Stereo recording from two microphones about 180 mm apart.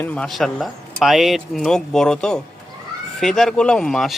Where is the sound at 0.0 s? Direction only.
5° left (ahead or behind).